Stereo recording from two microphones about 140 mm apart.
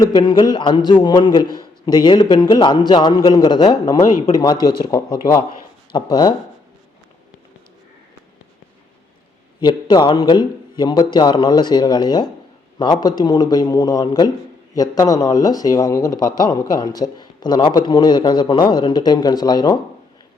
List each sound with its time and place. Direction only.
0.0 s a man's voice: 30° left (ahead or behind)
5.4 s a man's voice: 35° left (ahead or behind)
9.6 s a man's voice: 30° left (ahead or behind)